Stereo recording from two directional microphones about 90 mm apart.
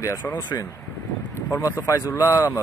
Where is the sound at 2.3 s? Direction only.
45° left (ahead or behind).